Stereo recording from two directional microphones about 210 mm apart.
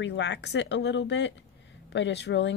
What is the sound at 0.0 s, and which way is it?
A woman's voice, 55° left (ahead or behind).